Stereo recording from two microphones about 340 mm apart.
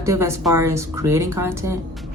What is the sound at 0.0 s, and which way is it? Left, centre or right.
A woman's voice, centre.